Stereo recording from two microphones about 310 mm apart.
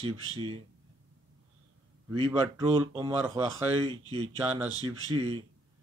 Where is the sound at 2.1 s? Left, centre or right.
Centre.